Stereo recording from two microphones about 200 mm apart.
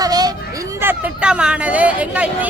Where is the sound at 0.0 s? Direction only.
20° right (ahead or behind).